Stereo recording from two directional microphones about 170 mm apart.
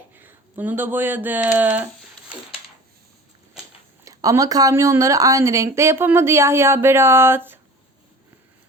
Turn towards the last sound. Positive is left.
turn(degrees=-15)  # may be behind; listen again after turning